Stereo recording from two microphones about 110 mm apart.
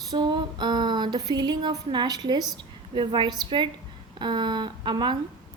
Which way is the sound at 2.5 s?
45° right (ahead or behind).